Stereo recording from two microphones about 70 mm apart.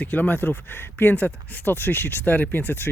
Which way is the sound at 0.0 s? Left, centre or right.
Left.